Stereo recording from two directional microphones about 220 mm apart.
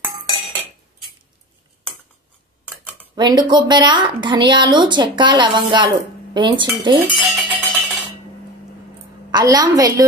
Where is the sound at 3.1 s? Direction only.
20° right (ahead or behind).